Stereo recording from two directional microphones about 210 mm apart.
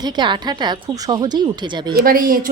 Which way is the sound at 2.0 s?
45° right (ahead or behind).